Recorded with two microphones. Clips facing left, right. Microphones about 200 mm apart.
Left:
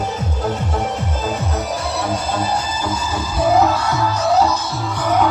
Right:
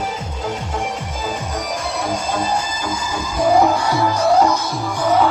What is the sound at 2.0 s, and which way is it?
Music, 10° right (ahead or behind).